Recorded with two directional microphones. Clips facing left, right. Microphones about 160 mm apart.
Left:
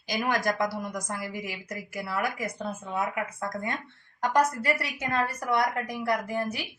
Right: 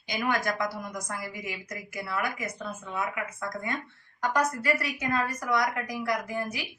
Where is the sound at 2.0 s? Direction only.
35° left (ahead or behind).